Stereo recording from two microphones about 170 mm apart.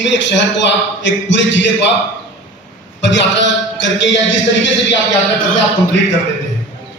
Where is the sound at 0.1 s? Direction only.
90° left.